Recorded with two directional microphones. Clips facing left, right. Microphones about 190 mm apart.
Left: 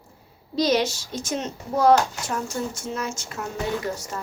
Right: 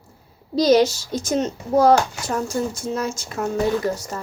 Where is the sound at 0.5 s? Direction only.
40° right (ahead or behind).